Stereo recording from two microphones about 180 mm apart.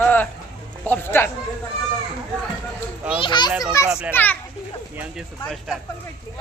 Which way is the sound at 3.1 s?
25° left (ahead or behind).